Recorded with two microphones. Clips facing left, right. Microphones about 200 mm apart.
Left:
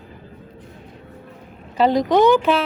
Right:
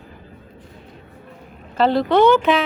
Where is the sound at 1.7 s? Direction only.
15° left (ahead or behind).